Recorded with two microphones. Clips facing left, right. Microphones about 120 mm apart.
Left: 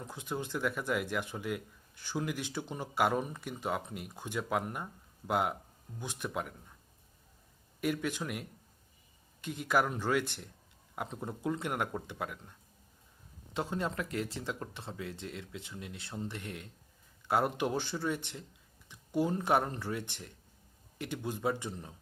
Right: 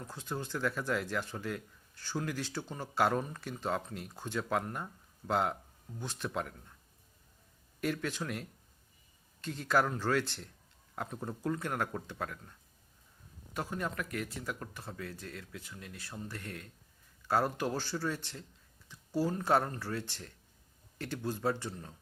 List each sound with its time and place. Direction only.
0.1 s speech: 15° left (ahead or behind)
7.8 s speech: 10° left (ahead or behind)
13.5 s speech: 25° left (ahead or behind)